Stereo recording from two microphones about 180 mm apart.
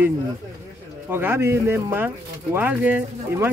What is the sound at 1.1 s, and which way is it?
Speech, 10° right (ahead or behind).